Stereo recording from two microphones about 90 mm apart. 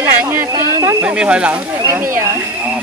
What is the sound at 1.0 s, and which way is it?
Speech, 10° right (ahead or behind).